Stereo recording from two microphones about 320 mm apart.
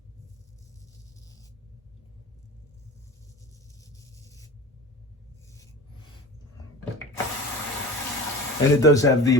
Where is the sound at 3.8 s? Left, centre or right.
Centre.